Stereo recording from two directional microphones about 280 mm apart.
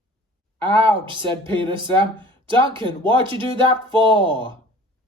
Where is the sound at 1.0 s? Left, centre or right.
Centre.